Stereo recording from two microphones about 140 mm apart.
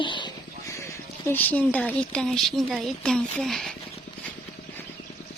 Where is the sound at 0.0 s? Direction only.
35° left (ahead or behind).